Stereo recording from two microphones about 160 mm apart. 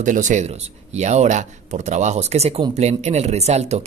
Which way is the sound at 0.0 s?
50° right (ahead or behind).